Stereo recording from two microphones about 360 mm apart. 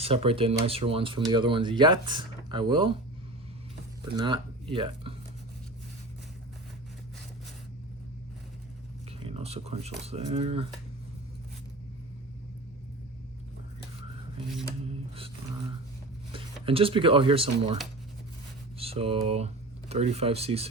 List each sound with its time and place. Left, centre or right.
0.0 s speech: centre
4.7 s speech: centre
9.2 s speech: centre
14.8 s speech: centre
16.3 s speech: centre
18.8 s speech: centre